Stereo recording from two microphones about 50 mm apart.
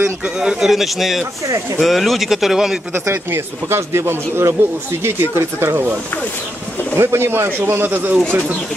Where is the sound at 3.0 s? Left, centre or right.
Right.